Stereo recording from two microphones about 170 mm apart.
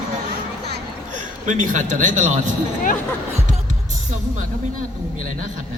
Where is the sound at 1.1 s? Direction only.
45° right (ahead or behind).